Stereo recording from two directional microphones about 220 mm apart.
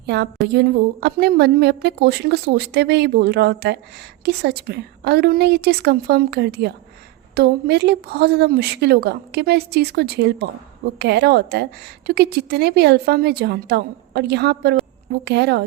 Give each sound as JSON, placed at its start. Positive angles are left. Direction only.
{"t": 0.0, "sound": "a woman's voice", "side_deg": -50}